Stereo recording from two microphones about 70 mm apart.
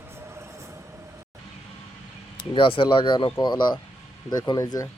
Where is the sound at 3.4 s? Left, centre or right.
Left.